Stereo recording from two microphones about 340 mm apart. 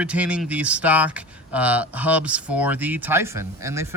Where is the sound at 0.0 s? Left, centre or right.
Centre.